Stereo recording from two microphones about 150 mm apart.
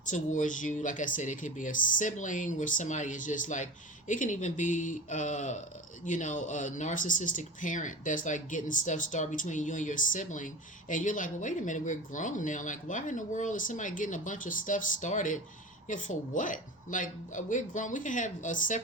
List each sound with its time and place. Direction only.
0.0 s speech: 60° left (ahead or behind)